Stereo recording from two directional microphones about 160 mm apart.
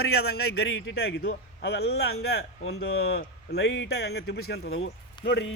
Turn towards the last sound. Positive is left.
turn(degrees=90)